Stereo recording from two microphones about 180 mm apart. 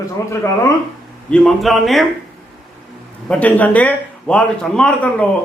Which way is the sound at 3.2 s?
10° left (ahead or behind).